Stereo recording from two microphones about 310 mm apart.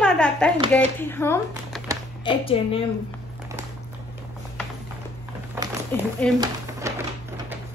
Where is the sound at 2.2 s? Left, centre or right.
Centre.